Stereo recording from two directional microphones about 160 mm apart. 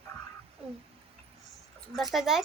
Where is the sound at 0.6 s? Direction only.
35° right (ahead or behind).